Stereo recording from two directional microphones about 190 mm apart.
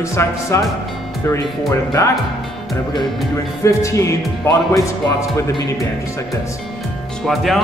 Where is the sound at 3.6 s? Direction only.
15° left (ahead or behind).